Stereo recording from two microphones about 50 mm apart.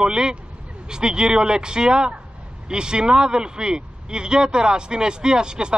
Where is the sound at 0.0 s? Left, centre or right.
Centre.